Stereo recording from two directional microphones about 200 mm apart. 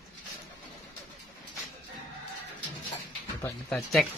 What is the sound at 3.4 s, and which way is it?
Speech, 5° left (ahead or behind).